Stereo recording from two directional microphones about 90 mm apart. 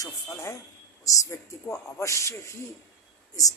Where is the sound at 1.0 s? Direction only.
35° left (ahead or behind).